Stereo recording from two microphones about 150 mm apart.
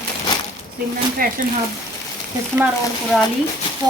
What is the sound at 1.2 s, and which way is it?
Speech, 70° right (ahead or behind).